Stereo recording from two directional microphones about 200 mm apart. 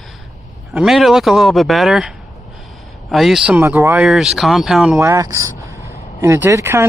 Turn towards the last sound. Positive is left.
turn(degrees=-15)  # may be behind; listen again after turning